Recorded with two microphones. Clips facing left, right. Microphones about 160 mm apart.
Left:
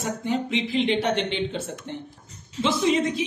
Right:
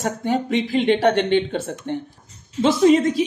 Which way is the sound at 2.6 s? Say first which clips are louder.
Right 7 dB; 45° right (ahead or behind).